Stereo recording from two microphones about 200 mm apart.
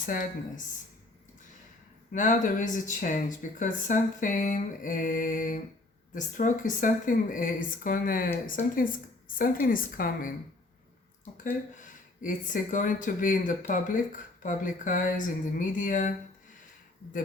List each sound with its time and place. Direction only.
0.0 s speech: 40° left (ahead or behind)
2.1 s speech: 40° left (ahead or behind)
11.4 s speech: 40° left (ahead or behind)